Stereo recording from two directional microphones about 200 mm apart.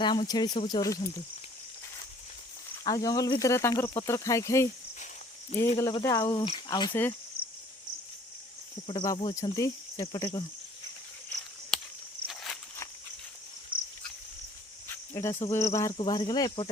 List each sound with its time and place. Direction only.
0.0 s speech: 25° left (ahead or behind)
2.8 s speech: 20° left (ahead or behind)
5.7 s speech: 20° left (ahead or behind)
8.9 s speech: 25° left (ahead or behind)
11.7 s cricket: centre (ahead or behind)
12.3 s a sound: centre (ahead or behind)
13.7 s dog: 45° right (ahead or behind)
15.1 s cricket: 15° left (ahead or behind)
15.4 s speech: 15° left (ahead or behind)